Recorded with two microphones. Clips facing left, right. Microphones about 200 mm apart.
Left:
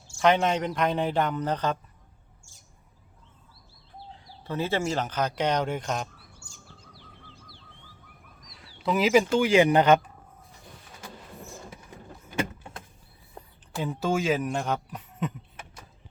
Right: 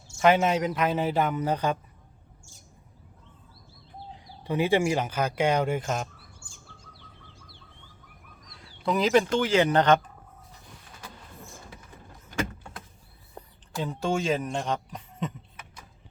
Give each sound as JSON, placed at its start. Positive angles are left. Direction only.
{"t": 0.2, "sound": "a man's voice", "side_deg": -5}
{"t": 4.4, "sound": "speech", "side_deg": -15}
{"t": 8.4, "sound": "speech", "side_deg": 0}
{"t": 13.8, "sound": "a man's voice", "side_deg": 5}